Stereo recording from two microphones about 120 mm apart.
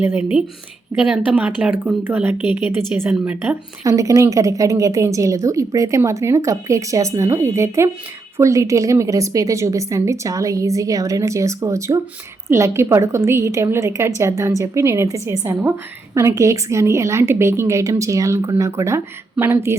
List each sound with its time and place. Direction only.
0.0 s speech: 15° right (ahead or behind)
3.8 s a woman's voice: 25° right (ahead or behind)